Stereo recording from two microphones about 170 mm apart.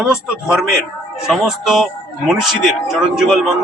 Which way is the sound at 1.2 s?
Centre (ahead or behind).